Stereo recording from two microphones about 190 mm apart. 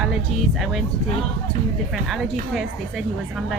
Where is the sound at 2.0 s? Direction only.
Centre (ahead or behind).